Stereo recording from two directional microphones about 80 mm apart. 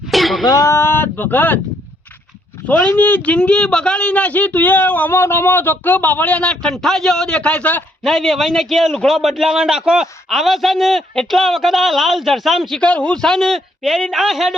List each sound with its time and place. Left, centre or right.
0.1 s a sound: centre
0.4 s speech: left
0.8 s a man's voice: left
2.6 s a man's voice: left
8.0 s a man's voice: centre
12.8 s a man's voice: centre
13.2 s a man's voice: centre